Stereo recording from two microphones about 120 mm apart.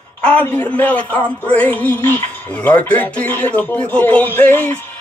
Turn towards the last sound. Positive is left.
turn(degrees=15)  # may be behind; listen again after turning